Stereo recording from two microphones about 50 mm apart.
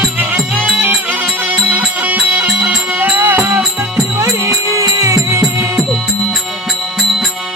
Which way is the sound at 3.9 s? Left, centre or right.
Right.